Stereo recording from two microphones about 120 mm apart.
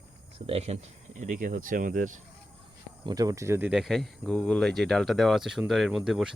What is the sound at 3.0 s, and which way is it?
Speech, 35° right (ahead or behind).